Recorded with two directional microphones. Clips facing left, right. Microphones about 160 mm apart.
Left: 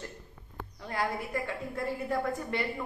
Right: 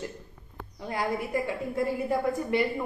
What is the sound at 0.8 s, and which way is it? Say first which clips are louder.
A woman's voice: right 3 dB; 15° right (ahead or behind).